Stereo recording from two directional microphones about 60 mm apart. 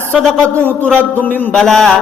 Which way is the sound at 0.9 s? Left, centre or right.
Left.